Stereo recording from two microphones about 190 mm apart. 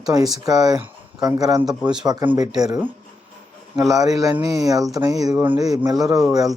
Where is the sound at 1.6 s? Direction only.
5° right (ahead or behind).